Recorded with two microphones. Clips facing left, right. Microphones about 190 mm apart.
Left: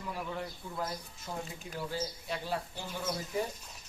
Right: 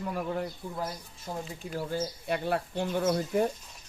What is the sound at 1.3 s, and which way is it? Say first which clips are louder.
Speech: right 3 dB; 20° right (ahead or behind).